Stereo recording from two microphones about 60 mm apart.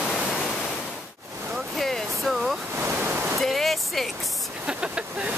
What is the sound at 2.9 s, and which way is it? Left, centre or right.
Pink noise, right.